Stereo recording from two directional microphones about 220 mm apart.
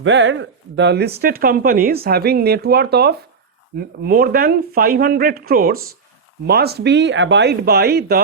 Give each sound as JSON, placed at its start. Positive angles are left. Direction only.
{"t": 0.0, "sound": "speech", "side_deg": -60}